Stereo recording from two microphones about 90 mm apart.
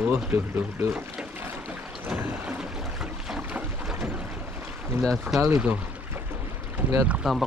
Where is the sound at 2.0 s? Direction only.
20° right (ahead or behind).